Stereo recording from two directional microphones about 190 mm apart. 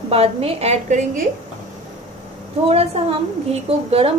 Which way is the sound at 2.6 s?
30° right (ahead or behind).